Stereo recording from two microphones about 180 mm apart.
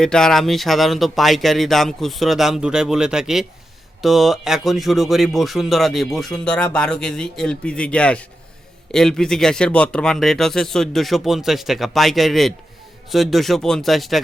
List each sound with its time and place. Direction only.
0.0 s speech: 5° left (ahead or behind)